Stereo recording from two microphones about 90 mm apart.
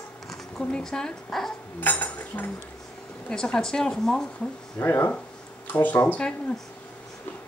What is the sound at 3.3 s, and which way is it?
Speech, 5° left (ahead or behind).